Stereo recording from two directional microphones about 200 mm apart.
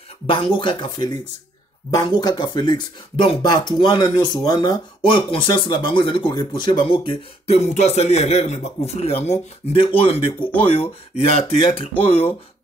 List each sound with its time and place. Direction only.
0.3 s speech: 25° left (ahead or behind)